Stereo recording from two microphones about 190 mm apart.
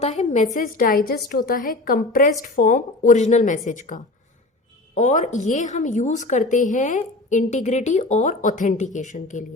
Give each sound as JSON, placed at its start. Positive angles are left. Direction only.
{"t": 0.0, "sound": "a woman's voice", "side_deg": 40}